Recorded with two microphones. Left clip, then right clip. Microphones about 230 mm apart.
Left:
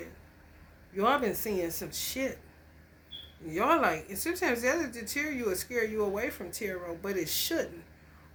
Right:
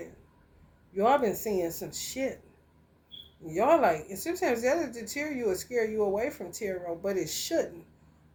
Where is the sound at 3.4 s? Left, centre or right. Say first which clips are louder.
Right 3 dB; left.